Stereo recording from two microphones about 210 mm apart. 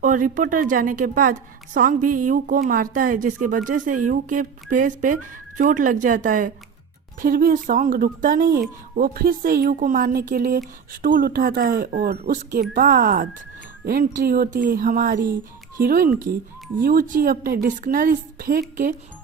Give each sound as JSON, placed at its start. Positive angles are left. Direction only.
{"t": 0.0, "sound": "a woman's voice", "side_deg": -40}